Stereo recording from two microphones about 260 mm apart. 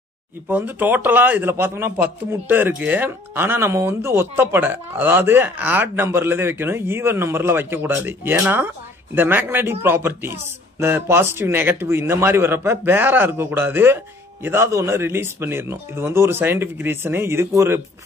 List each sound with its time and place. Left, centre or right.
0.5 s a man's voice: centre